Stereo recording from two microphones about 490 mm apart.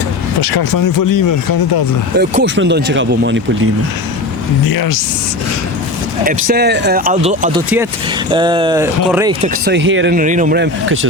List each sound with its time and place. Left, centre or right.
0.4 s speech: left
2.1 s speech: right
4.6 s speech: left
6.2 s speech: centre
9.6 s speech: right